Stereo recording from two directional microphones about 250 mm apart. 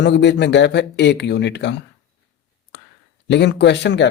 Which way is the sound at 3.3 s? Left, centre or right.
Left.